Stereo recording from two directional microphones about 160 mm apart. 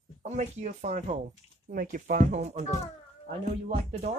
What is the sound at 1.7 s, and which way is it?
Speech, 60° right (ahead or behind).